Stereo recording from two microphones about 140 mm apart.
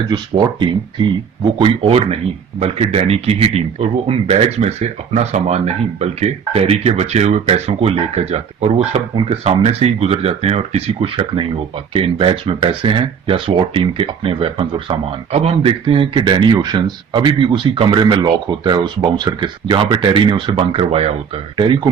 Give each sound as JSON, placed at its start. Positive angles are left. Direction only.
{"t": 0.1, "sound": "speech", "side_deg": -30}